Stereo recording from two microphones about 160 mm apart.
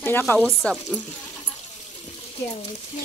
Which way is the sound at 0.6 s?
Centre (ahead or behind).